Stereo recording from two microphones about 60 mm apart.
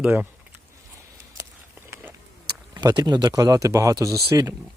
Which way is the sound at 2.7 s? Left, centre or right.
Right.